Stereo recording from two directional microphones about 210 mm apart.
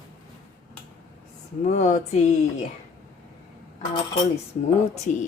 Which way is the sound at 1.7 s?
35° left (ahead or behind).